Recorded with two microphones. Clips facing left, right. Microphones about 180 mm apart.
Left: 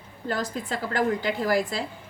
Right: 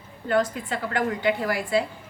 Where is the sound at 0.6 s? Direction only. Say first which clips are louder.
Left 1 dB; 40° left (ahead or behind).